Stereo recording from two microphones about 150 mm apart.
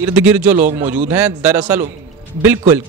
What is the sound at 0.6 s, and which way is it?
Speech, 45° right (ahead or behind).